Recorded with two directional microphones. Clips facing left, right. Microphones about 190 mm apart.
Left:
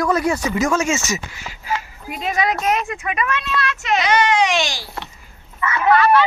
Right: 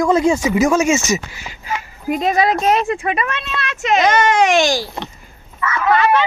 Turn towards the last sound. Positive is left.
turn(degrees=-20)  # may be behind; listen again after turning